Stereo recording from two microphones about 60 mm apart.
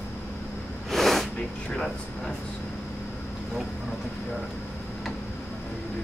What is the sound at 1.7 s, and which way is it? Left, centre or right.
Speech, centre.